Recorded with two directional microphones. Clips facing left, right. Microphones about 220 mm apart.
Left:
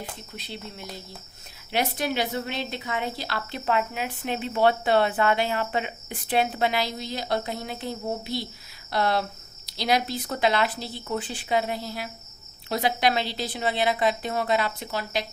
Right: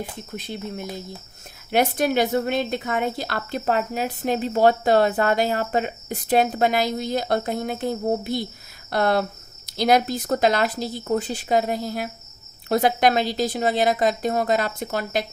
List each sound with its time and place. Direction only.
0.3 s speech: 50° right (ahead or behind)